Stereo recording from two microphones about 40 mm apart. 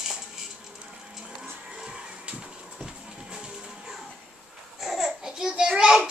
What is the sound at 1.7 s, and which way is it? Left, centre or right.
Music, right.